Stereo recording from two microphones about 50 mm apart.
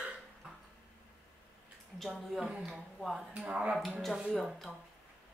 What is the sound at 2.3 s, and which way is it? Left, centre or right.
A man's voice, centre.